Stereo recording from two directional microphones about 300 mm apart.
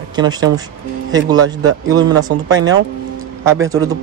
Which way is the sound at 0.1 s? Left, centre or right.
Centre.